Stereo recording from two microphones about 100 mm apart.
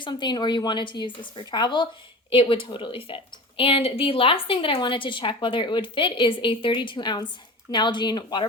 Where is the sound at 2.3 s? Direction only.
60° left (ahead or behind).